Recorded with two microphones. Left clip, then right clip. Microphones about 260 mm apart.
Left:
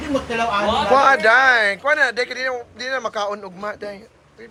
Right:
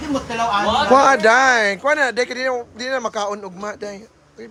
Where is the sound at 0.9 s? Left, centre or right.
Right.